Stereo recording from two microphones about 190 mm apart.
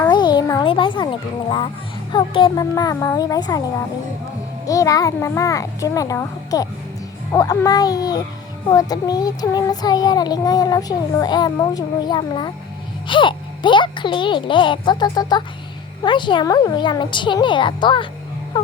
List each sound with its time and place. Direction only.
0.1 s a sound: 20° left (ahead or behind)
2.1 s speech: 25° left (ahead or behind)
4.6 s a child's voice: 15° left (ahead or behind)
18.5 s whimper: 25° left (ahead or behind)